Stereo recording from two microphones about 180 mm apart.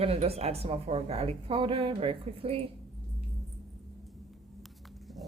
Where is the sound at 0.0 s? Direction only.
35° right (ahead or behind).